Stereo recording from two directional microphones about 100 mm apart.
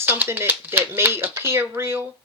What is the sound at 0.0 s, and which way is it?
Speech, 20° right (ahead or behind).